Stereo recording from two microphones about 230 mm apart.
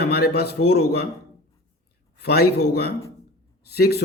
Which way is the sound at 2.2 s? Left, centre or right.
Left.